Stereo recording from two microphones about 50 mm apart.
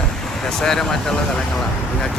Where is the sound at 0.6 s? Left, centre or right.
Centre.